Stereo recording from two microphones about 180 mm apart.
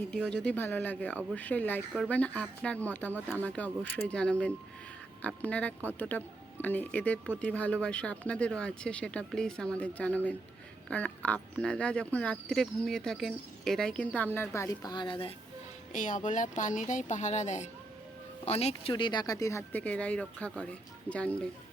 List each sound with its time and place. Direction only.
0.3 s speech: 5° left (ahead or behind)
3.1 s speech: 10° right (ahead or behind)
3.3 s speech: 5° left (ahead or behind); by 15.3 s 25° left (ahead or behind)
15.9 s speech: 45° left (ahead or behind); by 21.3 s 5° left (ahead or behind)